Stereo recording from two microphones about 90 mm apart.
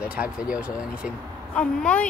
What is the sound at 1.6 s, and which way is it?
Speech, 15° left (ahead or behind).